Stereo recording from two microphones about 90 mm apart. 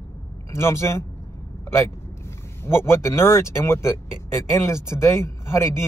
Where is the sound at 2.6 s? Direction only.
30° left (ahead or behind).